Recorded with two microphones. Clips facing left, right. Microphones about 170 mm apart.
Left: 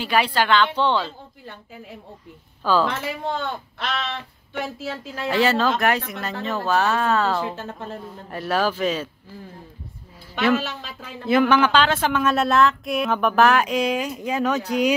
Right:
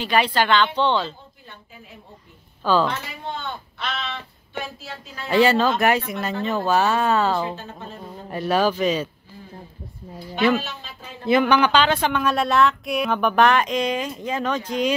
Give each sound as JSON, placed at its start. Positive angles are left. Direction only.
{"t": 0.0, "sound": "a woman's voice", "side_deg": 5}
{"t": 2.6, "sound": "a woman's voice", "side_deg": 5}
{"t": 3.3, "sound": "speech", "side_deg": 85}
{"t": 4.7, "sound": "speech", "side_deg": 90}
{"t": 5.3, "sound": "a woman's voice", "side_deg": 0}
{"t": 10.6, "sound": "speech", "side_deg": 90}
{"t": 11.2, "sound": "a woman's voice", "side_deg": 5}